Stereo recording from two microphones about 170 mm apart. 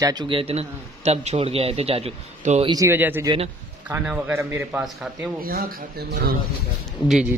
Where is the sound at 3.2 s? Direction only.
35° right (ahead or behind).